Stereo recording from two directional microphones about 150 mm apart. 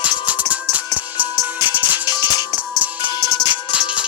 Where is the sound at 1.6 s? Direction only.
10° right (ahead or behind).